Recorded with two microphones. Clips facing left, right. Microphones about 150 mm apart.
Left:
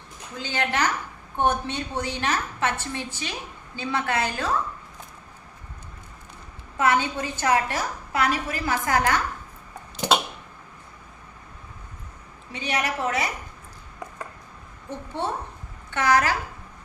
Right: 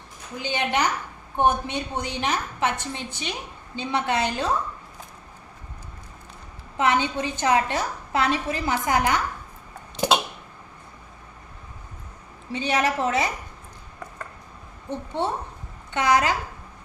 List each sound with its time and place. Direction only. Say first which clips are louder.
0.3 s a woman's voice: right 1 dB; 15° right (ahead or behind)
6.7 s a woman's voice: even; 20° right (ahead or behind)
12.5 s a woman's voice: right 4 dB; 30° right (ahead or behind)
14.8 s a woman's voice: right 3 dB; 20° right (ahead or behind)